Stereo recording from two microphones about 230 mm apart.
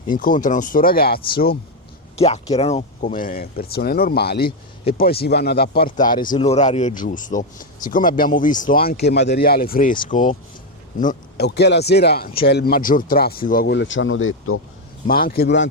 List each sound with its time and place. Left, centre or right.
0.1 s a man's voice: left
2.1 s a man's voice: left
6.3 s a man's voice: left
15.0 s speech: left